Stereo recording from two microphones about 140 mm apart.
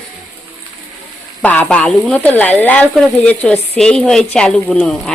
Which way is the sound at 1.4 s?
10° left (ahead or behind).